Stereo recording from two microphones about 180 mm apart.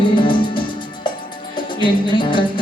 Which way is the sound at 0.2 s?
25° left (ahead or behind).